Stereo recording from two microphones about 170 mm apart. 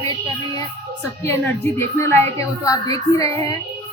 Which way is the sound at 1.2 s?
15° left (ahead or behind).